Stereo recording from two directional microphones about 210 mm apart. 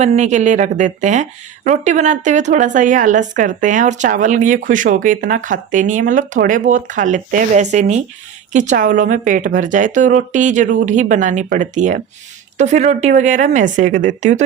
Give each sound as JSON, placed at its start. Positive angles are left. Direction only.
{"t": 0.2, "sound": "speech", "side_deg": -35}